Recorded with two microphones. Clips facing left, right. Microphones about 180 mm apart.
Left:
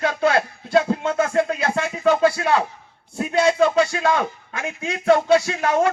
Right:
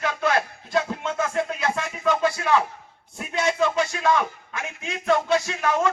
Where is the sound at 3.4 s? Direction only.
35° left (ahead or behind).